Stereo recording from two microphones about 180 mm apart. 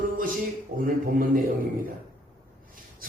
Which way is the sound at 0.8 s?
50° right (ahead or behind).